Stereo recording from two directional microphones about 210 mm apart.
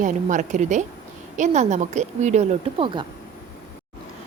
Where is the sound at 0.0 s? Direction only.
35° right (ahead or behind).